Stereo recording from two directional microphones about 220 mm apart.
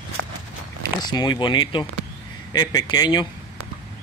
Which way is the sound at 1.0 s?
20° left (ahead or behind).